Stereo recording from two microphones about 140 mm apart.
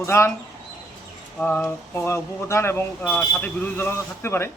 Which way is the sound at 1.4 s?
10° left (ahead or behind).